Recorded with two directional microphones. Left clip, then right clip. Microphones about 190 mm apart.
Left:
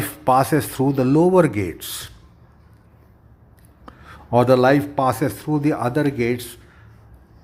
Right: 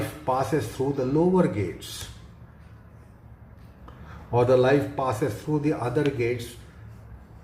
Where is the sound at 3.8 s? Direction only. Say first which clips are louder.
Left 5 dB; 50° left (ahead or behind).